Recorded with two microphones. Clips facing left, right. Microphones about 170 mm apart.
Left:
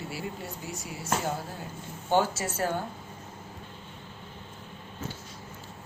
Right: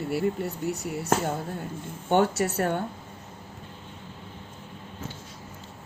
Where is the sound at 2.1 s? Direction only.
65° right (ahead or behind).